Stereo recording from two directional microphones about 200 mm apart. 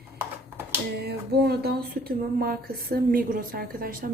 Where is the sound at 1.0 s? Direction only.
55° right (ahead or behind).